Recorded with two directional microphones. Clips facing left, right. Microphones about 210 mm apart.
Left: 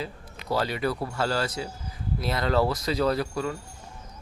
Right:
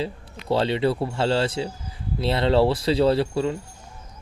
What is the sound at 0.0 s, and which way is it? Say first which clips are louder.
Speech: right 6 dB; 25° right (ahead or behind).